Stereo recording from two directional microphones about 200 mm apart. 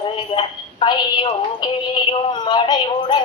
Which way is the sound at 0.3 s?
25° left (ahead or behind).